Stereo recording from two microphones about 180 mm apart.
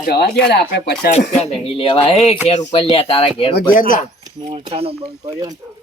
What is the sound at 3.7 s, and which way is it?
Speech, 50° left (ahead or behind).